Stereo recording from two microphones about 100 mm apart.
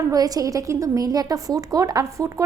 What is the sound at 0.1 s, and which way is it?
A woman's voice, 40° right (ahead or behind).